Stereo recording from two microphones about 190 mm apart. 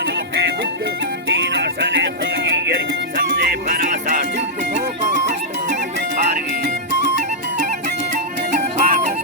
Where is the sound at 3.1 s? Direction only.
45° right (ahead or behind).